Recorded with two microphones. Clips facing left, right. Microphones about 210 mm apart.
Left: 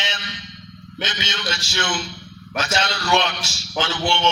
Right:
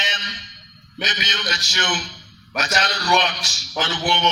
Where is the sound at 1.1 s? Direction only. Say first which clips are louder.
Left 1 dB; 25° left (ahead or behind).